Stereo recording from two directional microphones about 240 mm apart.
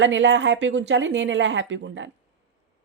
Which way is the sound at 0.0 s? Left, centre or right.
Right.